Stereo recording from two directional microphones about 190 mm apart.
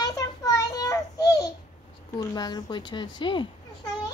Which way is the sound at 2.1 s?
20° left (ahead or behind).